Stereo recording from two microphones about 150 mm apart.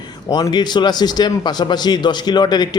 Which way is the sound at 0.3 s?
25° left (ahead or behind).